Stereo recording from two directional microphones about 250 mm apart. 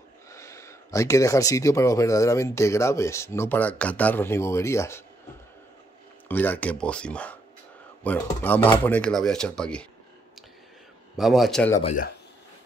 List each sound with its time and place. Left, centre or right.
0.3 s speech: centre
6.2 s speech: centre
11.1 s speech: centre
11.8 s speech: left